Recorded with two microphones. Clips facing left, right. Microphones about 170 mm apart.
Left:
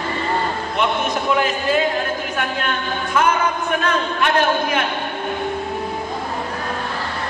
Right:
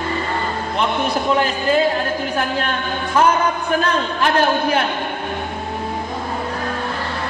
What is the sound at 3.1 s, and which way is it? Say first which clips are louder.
A man's voice: right 2 dB; 35° right (ahead or behind).